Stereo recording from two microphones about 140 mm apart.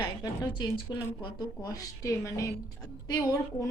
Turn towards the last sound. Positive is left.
turn(degrees=25)  # may be behind; listen again after turning